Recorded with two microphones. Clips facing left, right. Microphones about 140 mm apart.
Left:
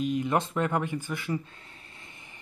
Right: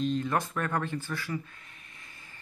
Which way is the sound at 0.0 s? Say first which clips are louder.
Left 2 dB; 15° left (ahead or behind).